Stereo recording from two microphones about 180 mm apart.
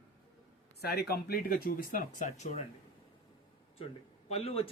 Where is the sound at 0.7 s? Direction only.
65° left (ahead or behind); by 2.6 s 40° left (ahead or behind).